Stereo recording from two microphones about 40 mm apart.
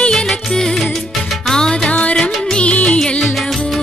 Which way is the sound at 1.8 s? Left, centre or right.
Left.